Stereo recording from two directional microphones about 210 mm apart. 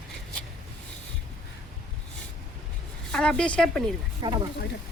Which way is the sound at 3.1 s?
5° left (ahead or behind).